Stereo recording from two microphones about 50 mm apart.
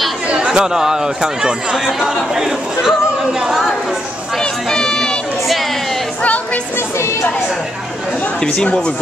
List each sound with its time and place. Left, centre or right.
0.5 s speech: centre
4.4 s a sound: centre
6.2 s music: left
8.5 s speech: centre